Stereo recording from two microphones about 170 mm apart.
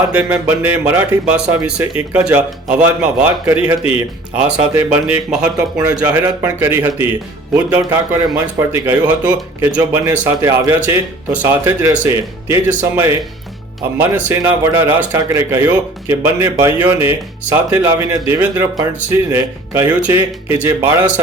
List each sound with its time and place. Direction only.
0.1 s speech: 10° right (ahead or behind)